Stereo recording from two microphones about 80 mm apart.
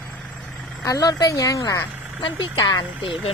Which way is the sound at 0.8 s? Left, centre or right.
Left.